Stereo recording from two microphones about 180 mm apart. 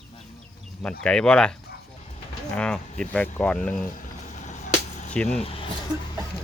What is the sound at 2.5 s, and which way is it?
Speech, 5° left (ahead or behind).